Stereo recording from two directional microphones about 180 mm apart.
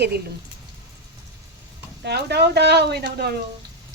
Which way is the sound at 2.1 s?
65° right (ahead or behind).